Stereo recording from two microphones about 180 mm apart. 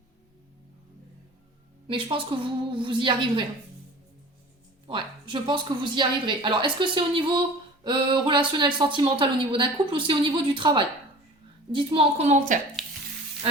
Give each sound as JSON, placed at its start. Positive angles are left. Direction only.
{"t": 1.9, "sound": "speech", "side_deg": -30}
{"t": 4.9, "sound": "a woman's voice", "side_deg": -25}
{"t": 12.8, "sound": "sizzle", "side_deg": 0}